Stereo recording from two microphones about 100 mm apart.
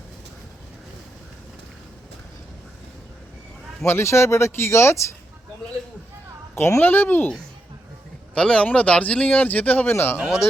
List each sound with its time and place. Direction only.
3.8 s speech: 25° left (ahead or behind)
6.6 s speech: 25° left (ahead or behind)
8.4 s speech: 10° left (ahead or behind)
10.2 s speech: 5° right (ahead or behind)